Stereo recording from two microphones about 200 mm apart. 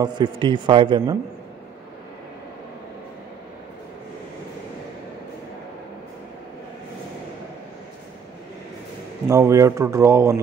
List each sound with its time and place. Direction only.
0.0 s a man's voice: 25° right (ahead or behind)
9.3 s speech: 15° right (ahead or behind)